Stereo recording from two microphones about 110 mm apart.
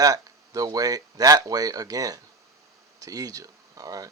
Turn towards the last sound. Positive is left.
turn(degrees=-35)  # may be behind; listen again after turning